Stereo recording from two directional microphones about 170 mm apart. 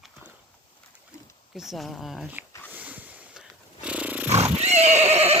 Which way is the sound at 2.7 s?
10° right (ahead or behind).